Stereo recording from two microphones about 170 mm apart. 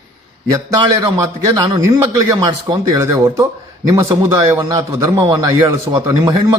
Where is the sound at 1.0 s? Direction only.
20° right (ahead or behind).